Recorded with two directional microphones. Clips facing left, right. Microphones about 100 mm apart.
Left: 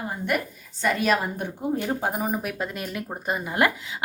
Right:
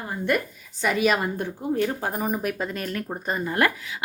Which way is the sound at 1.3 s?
20° left (ahead or behind).